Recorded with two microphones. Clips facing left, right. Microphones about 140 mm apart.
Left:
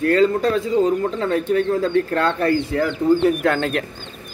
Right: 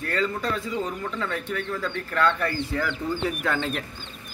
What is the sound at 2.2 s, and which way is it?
Speech, 30° left (ahead or behind).